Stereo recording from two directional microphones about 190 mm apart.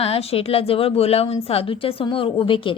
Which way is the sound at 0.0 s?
30° left (ahead or behind).